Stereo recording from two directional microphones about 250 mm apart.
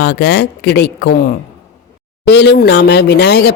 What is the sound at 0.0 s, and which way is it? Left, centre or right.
Speech, left.